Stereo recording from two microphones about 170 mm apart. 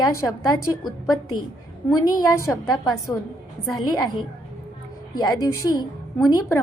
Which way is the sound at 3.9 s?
20° left (ahead or behind).